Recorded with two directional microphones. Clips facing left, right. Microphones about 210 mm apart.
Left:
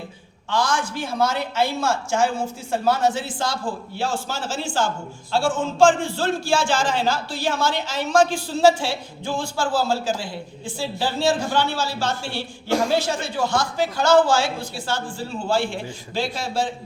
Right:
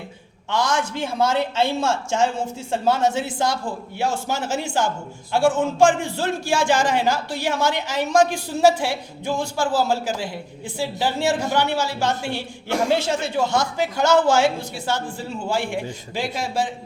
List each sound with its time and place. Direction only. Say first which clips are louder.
0.5 s speech: right 1 dB; 20° right (ahead or behind)